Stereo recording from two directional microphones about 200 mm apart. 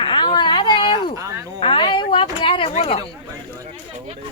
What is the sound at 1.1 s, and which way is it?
Cricket, 15° right (ahead or behind).